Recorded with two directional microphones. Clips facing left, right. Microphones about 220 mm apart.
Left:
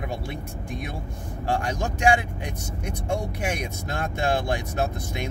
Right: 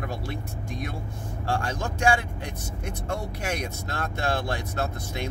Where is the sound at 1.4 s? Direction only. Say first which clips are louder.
Left 2 dB; 20° left (ahead or behind).